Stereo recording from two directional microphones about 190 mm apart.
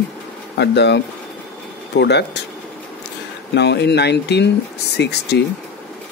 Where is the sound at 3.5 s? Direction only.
65° left (ahead or behind).